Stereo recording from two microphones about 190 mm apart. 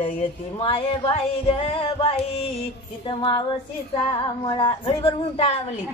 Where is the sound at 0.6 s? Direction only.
30° left (ahead or behind).